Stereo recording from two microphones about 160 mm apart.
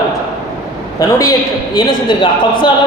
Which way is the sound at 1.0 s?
20° left (ahead or behind).